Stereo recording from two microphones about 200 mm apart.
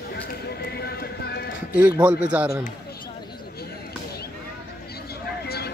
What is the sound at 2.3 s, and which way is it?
Speech, 5° right (ahead or behind).